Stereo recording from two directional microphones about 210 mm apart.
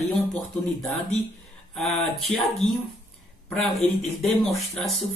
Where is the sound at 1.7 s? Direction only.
Centre (ahead or behind).